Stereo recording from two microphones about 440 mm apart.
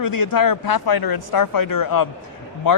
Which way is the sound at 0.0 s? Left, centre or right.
Left.